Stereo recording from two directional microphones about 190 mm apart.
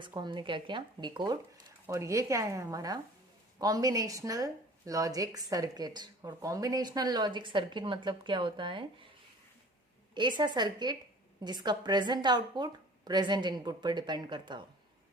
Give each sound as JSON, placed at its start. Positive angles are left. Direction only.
{"t": 0.0, "sound": "a woman's voice", "side_deg": -25}
{"t": 10.2, "sound": "speech", "side_deg": -25}